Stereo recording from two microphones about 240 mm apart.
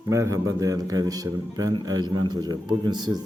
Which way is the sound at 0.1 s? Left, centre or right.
Centre.